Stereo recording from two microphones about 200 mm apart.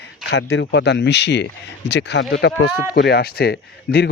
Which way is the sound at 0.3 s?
55° left (ahead or behind).